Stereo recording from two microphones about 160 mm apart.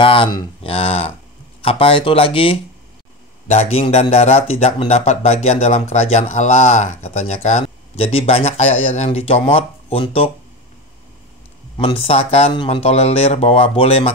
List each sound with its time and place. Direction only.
0.0 s a man's voice: 35° left (ahead or behind)
11.7 s a man's voice: 35° left (ahead or behind)